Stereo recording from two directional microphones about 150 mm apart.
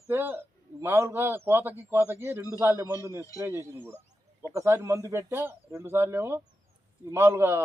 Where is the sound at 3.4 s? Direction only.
15° right (ahead or behind).